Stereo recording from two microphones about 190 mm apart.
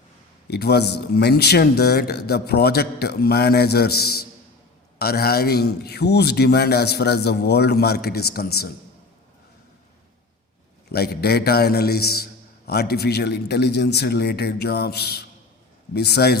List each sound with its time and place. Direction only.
0.4 s a man's voice: 60° left (ahead or behind)
10.9 s a man's voice: 55° left (ahead or behind)